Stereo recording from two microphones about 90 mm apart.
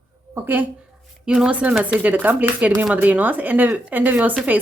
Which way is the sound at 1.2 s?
10° right (ahead or behind).